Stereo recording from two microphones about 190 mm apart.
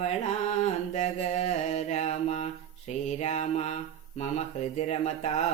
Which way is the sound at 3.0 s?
35° left (ahead or behind).